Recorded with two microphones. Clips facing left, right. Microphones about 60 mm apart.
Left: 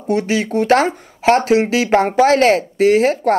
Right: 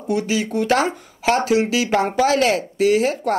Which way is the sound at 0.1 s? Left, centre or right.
Left.